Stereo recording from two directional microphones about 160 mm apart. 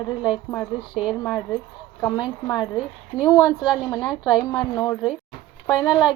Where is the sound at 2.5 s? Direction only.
30° left (ahead or behind).